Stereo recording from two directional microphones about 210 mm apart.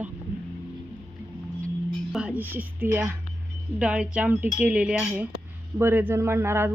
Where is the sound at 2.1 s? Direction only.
5° right (ahead or behind).